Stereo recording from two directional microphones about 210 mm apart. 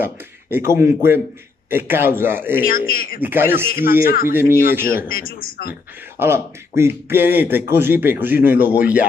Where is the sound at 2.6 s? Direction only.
45° left (ahead or behind).